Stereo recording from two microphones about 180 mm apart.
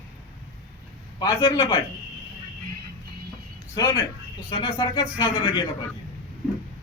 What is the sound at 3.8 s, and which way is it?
A man's voice, 20° left (ahead or behind).